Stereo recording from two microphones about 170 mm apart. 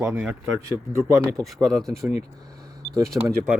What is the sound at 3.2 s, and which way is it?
Speech, 15° right (ahead or behind).